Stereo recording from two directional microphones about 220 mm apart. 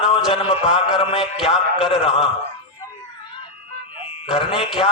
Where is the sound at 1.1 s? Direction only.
Centre (ahead or behind).